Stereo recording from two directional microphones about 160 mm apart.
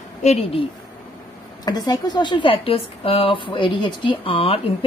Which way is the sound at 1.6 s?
25° left (ahead or behind).